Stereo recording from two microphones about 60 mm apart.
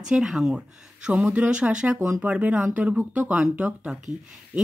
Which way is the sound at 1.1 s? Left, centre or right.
Right.